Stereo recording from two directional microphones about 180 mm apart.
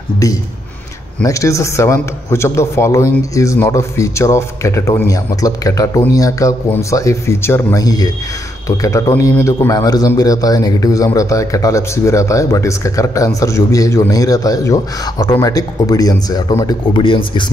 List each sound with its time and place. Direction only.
1.2 s a man's voice: 15° left (ahead or behind)